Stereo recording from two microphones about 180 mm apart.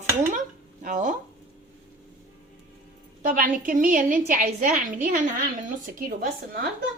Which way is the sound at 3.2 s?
50° right (ahead or behind).